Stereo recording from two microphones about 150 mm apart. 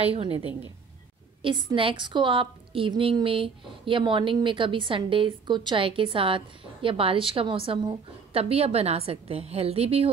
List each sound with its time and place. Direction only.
0.0 s a woman's voice: 40° right (ahead or behind)
1.4 s a woman's voice: 30° right (ahead or behind)